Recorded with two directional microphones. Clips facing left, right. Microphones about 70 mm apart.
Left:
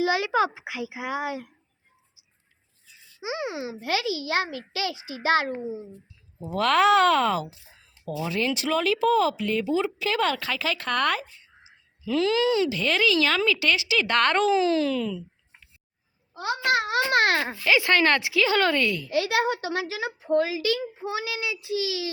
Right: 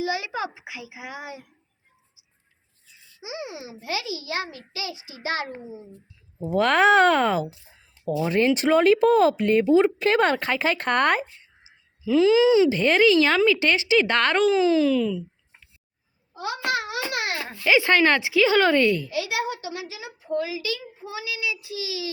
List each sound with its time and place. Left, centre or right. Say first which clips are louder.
0.0 s a child's voice: left 5 dB; left
3.2 s a woman's voice: left 4 dB; left
6.5 s a woman's voice: right 2 dB; right
8.5 s speech: right 7 dB; right
12.0 s speech: right 6 dB; centre
12.6 s a woman's voice: right 6 dB; right
14.1 s speech: right 1 dB; centre
16.7 s speech: left 5 dB; left
17.7 s a woman's voice: right 2 dB; centre
19.1 s a woman's voice: left 3 dB; left